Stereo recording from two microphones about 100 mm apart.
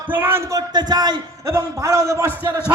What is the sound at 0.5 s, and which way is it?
A man's voice, 45° right (ahead or behind).